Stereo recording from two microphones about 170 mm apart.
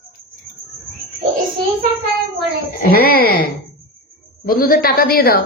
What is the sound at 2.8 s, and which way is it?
A woman's voice, 60° left (ahead or behind).